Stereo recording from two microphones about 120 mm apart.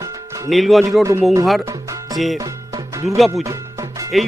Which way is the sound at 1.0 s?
20° right (ahead or behind).